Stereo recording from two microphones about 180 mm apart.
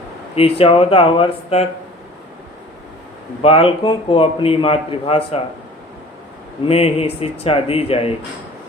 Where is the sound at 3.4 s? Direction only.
30° left (ahead or behind).